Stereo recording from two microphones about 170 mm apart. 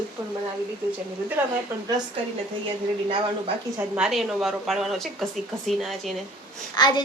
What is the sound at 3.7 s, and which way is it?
A woman's voice, 5° right (ahead or behind).